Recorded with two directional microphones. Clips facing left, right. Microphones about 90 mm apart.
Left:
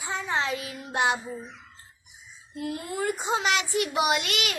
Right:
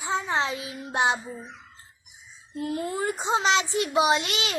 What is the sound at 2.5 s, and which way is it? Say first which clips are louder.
A child's voice: right 2 dB; 35° right (ahead or behind).